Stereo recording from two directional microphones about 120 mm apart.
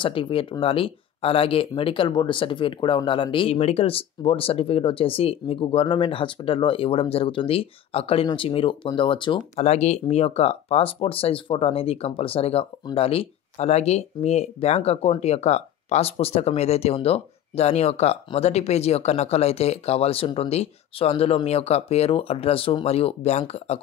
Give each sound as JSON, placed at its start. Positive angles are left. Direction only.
{"t": 0.0, "sound": "speech", "side_deg": 50}
{"t": 9.6, "sound": "speech", "side_deg": 65}